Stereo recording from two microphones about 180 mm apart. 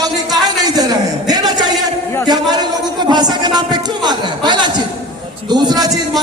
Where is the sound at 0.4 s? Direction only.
20° right (ahead or behind).